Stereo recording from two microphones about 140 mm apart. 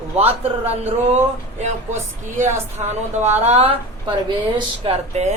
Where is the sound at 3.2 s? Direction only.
50° right (ahead or behind).